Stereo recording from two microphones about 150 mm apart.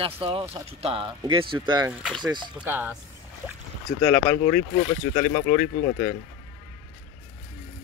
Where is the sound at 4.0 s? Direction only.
35° left (ahead or behind).